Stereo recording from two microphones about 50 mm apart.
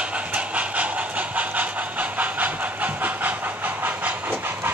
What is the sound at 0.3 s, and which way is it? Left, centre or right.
Train, right.